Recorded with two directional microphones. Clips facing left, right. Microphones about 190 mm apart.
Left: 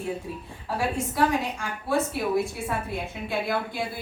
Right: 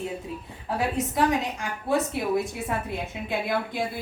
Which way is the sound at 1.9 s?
20° right (ahead or behind).